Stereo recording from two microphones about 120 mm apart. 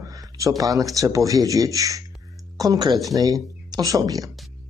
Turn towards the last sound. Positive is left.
turn(degrees=-30)  # may be behind; listen again after turning